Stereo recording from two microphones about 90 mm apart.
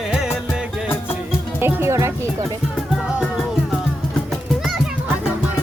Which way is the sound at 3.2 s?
Centre (ahead or behind).